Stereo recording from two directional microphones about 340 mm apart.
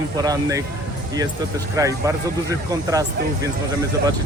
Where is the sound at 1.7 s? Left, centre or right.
Centre.